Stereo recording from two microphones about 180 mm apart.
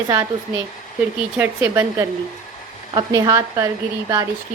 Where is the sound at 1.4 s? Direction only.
15° right (ahead or behind).